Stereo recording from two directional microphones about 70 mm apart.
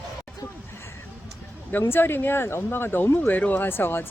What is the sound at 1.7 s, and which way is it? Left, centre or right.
Speech, left.